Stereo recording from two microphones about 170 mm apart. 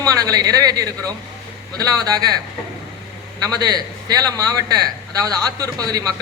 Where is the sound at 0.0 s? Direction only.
20° right (ahead or behind).